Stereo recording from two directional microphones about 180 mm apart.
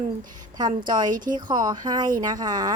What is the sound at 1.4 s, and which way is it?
A woman's voice, 25° right (ahead or behind).